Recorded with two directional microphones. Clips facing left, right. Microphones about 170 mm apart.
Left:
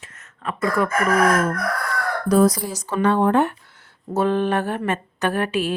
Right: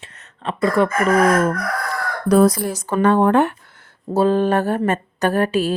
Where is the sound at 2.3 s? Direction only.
60° right (ahead or behind).